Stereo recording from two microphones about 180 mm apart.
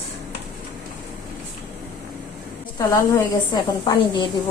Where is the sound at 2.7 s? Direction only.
20° left (ahead or behind).